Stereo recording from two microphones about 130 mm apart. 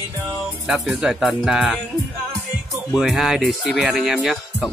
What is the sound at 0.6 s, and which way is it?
Music, 5° right (ahead or behind).